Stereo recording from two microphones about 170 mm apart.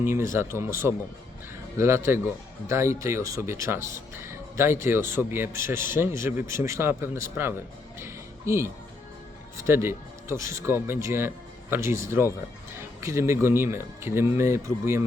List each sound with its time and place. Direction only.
0.0 s speech: 15° right (ahead or behind)
7.9 s music: 15° right (ahead or behind)
9.6 s speech: 15° right (ahead or behind)